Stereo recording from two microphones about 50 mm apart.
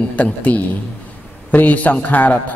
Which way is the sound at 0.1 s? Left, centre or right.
Left.